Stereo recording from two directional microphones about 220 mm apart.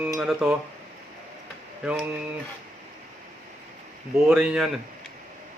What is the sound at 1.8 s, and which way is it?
Speech, 5° right (ahead or behind).